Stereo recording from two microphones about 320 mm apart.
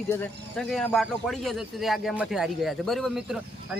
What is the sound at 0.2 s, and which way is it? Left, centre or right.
Speech, centre.